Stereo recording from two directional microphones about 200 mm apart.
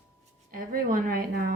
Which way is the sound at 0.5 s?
45° right (ahead or behind).